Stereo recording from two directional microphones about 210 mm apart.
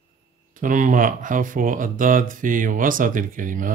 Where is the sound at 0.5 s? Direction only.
40° right (ahead or behind).